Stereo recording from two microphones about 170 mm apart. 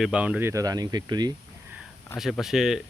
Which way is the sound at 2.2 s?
Centre (ahead or behind).